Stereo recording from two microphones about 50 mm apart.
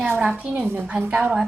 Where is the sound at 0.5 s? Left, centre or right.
Right.